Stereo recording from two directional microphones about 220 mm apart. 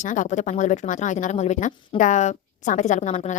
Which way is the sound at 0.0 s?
35° left (ahead or behind).